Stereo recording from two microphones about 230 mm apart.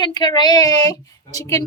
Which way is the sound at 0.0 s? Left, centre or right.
Centre.